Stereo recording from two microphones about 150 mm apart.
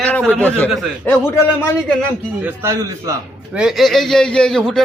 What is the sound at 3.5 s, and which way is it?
Speech, centre (ahead or behind).